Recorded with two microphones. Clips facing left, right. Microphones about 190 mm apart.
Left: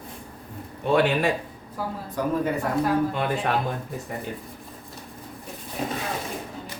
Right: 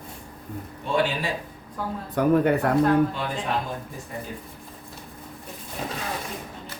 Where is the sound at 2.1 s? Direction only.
65° right (ahead or behind).